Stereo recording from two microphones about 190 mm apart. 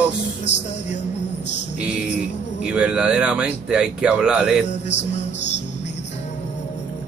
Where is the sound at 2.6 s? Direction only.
5° right (ahead or behind).